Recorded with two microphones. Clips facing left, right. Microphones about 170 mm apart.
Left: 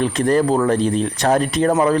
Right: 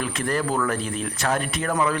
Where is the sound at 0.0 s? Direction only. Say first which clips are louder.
Left 9 dB; 35° left (ahead or behind).